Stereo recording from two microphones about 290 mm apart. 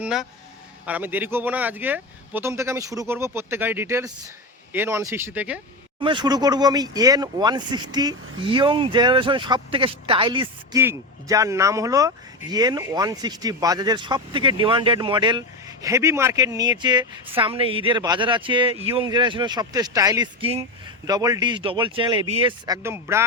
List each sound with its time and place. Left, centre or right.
0.0 s speech: centre
6.0 s speech: centre